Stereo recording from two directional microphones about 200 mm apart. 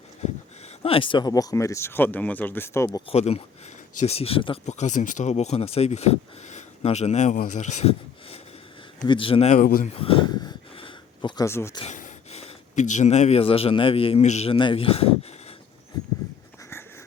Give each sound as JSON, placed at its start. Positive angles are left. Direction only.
{"t": 0.8, "sound": "speech", "side_deg": 30}
{"t": 3.1, "sound": "speech", "side_deg": 30}
{"t": 9.9, "sound": "a sound", "side_deg": 30}
{"t": 11.8, "sound": "speech", "side_deg": 35}